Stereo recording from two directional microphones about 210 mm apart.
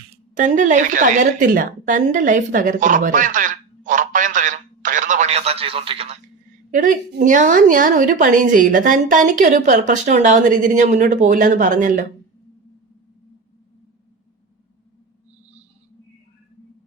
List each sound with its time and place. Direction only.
0.3 s a woman's voice: 35° right (ahead or behind)
6.7 s a woman's voice: 35° right (ahead or behind)